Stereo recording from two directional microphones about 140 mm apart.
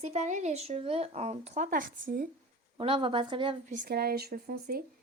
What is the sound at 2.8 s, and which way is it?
Speech, 40° right (ahead or behind).